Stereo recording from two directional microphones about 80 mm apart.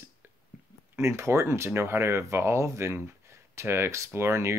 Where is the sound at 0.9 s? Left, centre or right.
Right.